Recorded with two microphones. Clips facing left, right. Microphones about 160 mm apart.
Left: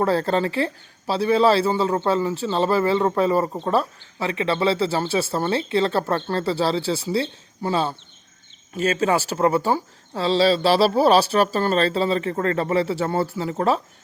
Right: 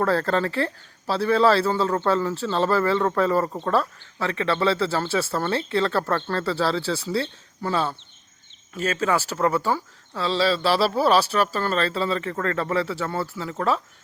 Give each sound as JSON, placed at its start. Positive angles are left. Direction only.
{"t": 0.0, "sound": "speech", "side_deg": 20}